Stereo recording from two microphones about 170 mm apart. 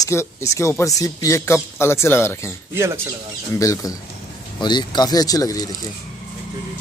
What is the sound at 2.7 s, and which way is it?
Speech, 15° right (ahead or behind).